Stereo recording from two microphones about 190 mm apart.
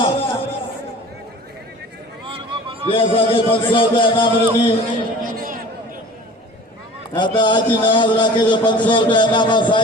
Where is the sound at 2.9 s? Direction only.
25° left (ahead or behind).